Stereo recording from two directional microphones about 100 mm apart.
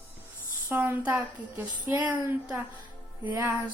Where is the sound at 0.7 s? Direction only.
20° right (ahead or behind).